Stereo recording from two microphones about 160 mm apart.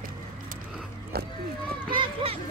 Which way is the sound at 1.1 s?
75° right (ahead or behind).